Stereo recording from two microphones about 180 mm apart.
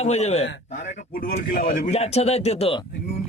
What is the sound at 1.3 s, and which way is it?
A man's voice, 50° left (ahead or behind).